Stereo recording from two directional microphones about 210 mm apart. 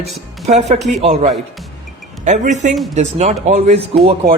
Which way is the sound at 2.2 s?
35° right (ahead or behind).